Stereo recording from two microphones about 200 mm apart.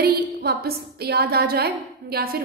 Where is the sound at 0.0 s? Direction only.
50° right (ahead or behind).